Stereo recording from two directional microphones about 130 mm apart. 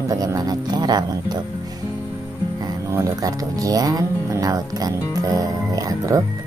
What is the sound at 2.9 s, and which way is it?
Speech, 30° right (ahead or behind).